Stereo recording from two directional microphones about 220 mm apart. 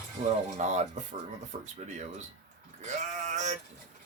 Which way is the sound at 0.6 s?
30° right (ahead or behind).